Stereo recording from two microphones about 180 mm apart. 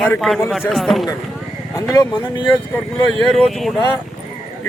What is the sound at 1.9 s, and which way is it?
Speech, 20° left (ahead or behind).